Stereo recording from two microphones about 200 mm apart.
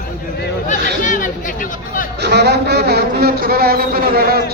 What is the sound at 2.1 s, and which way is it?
Speech, 55° right (ahead or behind).